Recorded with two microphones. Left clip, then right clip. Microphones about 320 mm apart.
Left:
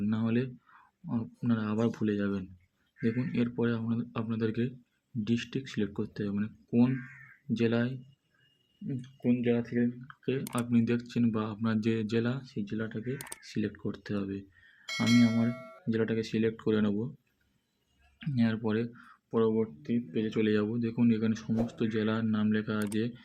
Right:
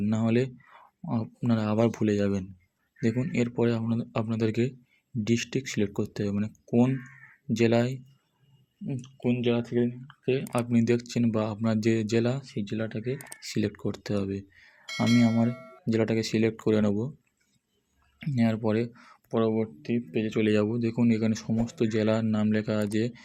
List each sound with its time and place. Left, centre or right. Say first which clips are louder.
0.0 s speech: right 5 dB; centre
9.2 s speech: right 2 dB; right
10.2 s speech: right 5 dB; centre
18.2 s speech: right 4 dB; centre